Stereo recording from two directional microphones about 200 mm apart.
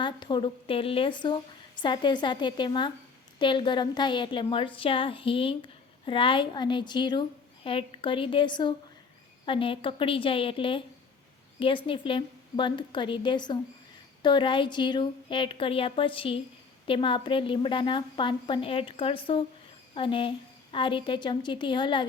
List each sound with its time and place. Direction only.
0.0 s a woman's voice: 25° left (ahead or behind)
11.9 s a woman's voice: 25° left (ahead or behind)